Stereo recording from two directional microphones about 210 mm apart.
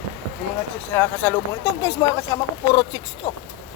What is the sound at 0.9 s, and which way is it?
Speech, 10° left (ahead or behind).